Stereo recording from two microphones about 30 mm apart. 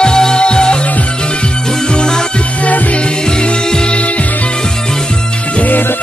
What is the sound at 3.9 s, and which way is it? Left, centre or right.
Music, left.